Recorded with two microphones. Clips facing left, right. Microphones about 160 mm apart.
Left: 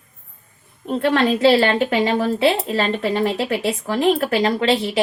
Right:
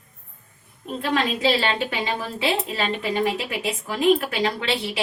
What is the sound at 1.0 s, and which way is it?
Speech, 60° left (ahead or behind).